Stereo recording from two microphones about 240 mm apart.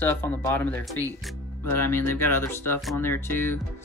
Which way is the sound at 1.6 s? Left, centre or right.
Left.